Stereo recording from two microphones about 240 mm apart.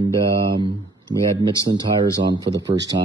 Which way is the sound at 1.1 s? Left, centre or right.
Centre.